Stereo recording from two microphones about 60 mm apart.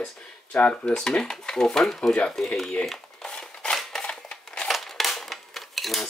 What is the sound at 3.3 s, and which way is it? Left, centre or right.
Scissors, centre.